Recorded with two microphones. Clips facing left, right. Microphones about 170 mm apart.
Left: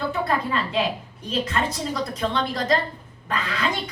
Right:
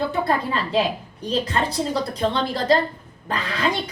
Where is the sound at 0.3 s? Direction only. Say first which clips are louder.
Right 2 dB; 35° right (ahead or behind).